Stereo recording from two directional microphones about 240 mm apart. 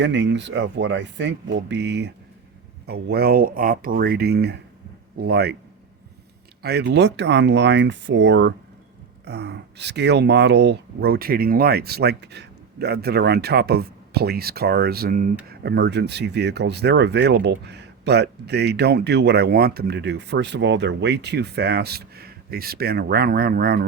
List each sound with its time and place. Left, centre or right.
0.0 s speech: right
6.6 s speech: right